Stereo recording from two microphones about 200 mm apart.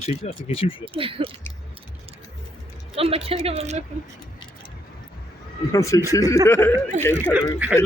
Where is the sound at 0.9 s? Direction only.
25° right (ahead or behind).